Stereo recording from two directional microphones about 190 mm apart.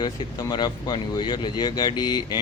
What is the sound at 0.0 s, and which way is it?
Speech, 20° left (ahead or behind).